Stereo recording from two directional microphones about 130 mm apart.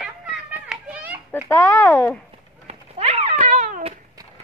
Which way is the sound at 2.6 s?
55° right (ahead or behind).